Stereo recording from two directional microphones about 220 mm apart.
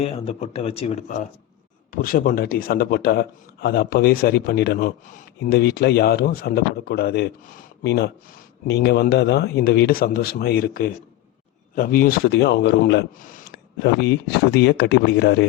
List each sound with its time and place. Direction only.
0.0 s a man's voice: 25° left (ahead or behind)
13.8 s speech: 50° left (ahead or behind)